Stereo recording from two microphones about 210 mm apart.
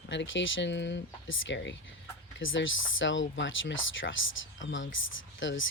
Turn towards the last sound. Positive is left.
turn(degrees=65)  # may be behind; listen again after turning